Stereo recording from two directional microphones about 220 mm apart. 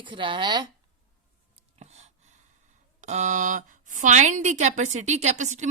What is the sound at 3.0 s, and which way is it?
Speech, 30° right (ahead or behind).